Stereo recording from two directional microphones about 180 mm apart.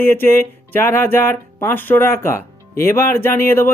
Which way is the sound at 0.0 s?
10° left (ahead or behind).